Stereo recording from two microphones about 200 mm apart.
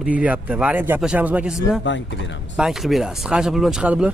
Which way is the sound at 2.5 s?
5° right (ahead or behind).